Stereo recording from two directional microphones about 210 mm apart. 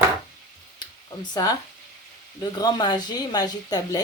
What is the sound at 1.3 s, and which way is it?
A woman's voice, 20° left (ahead or behind).